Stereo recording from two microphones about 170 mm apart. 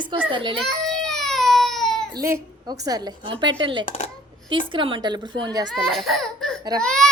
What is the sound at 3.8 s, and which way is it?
Speech, 40° left (ahead or behind).